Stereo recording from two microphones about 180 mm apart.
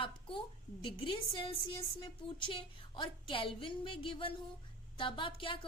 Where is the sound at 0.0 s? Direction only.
30° left (ahead or behind).